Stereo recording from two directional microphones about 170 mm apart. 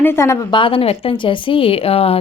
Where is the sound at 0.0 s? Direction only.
15° left (ahead or behind).